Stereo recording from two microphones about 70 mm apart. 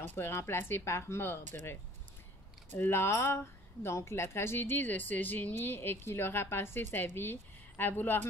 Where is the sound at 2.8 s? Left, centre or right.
Left.